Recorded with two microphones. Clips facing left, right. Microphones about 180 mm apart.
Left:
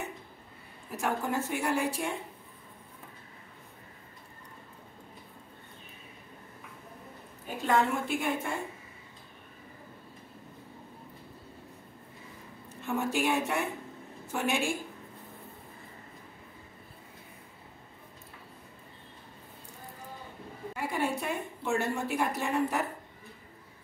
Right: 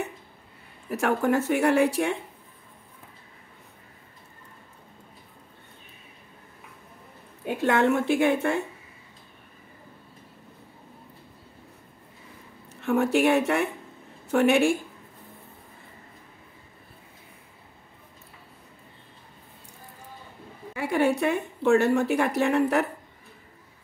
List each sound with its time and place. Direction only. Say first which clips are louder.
0.8 s a woman's voice: right 8 dB; 70° right (ahead or behind)
7.4 s a woman's voice: right 6 dB; 75° right (ahead or behind)
12.8 s a woman's voice: right 8 dB; 65° right (ahead or behind)
20.7 s a woman's voice: right 8 dB; 75° right (ahead or behind)